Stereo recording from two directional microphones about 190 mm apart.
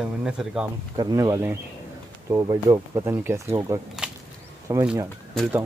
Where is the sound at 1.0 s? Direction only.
20° right (ahead or behind).